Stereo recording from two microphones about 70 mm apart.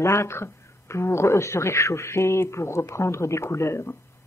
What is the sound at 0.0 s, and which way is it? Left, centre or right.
A woman's voice, left.